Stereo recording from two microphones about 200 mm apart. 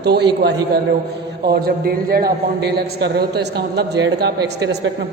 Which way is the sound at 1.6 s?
50° right (ahead or behind).